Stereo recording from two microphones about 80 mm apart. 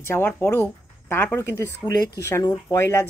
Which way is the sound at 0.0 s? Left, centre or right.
Left.